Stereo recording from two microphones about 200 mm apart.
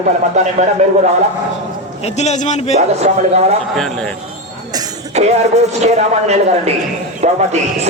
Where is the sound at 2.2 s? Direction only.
35° left (ahead or behind).